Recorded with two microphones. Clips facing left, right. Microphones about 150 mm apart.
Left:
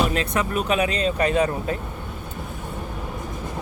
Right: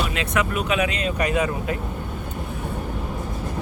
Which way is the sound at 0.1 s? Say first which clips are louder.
Even; 40° left (ahead or behind).